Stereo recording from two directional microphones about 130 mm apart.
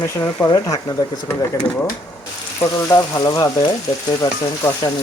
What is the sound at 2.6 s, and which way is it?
Speech, 30° left (ahead or behind).